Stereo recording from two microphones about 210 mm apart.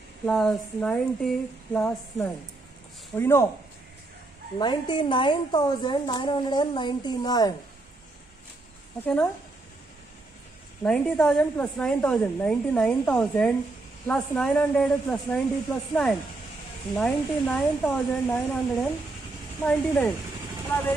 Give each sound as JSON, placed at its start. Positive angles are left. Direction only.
{"t": 0.3, "sound": "a woman's voice", "side_deg": 0}
{"t": 4.6, "sound": "a woman's voice", "side_deg": 20}
{"t": 9.0, "sound": "speech", "side_deg": 10}
{"t": 10.8, "sound": "a woman's voice", "side_deg": 5}